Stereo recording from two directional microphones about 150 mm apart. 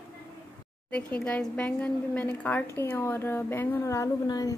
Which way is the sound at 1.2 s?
10° left (ahead or behind).